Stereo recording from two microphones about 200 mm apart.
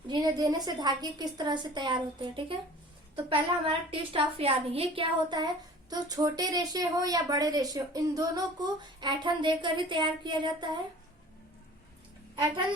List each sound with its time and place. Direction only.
0.1 s speech: 20° right (ahead or behind)